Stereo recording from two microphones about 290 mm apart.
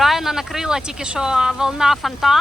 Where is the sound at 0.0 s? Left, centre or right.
Centre.